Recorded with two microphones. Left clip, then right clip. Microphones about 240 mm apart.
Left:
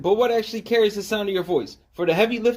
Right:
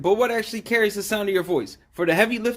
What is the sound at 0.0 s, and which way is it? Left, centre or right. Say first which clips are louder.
Speech: left 1 dB; right.